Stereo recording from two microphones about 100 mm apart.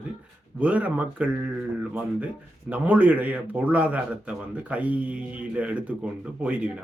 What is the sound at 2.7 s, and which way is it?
Speech, 15° right (ahead or behind).